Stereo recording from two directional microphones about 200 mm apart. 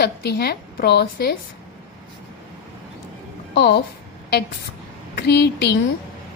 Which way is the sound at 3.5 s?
60° left (ahead or behind).